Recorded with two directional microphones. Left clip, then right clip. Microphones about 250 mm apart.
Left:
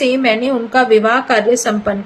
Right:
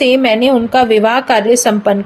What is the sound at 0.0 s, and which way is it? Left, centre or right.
A woman's voice, right.